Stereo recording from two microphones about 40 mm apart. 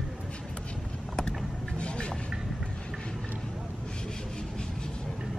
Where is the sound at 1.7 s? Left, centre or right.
Left.